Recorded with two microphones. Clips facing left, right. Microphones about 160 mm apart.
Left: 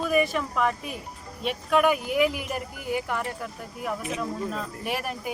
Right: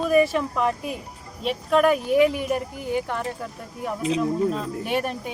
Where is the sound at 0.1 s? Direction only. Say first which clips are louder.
Right 5 dB; 30° right (ahead or behind).